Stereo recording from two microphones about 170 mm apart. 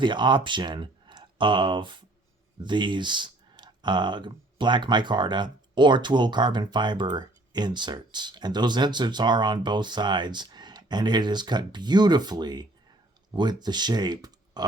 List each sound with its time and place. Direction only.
0.0 s speech: 25° right (ahead or behind)